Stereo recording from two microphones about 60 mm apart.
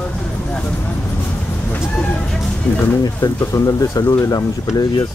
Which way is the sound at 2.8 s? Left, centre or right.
Left.